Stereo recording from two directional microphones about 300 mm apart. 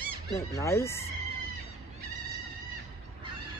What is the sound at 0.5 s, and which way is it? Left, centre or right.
Speech, centre.